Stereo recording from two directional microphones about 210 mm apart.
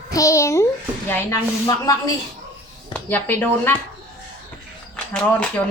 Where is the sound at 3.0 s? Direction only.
10° left (ahead or behind).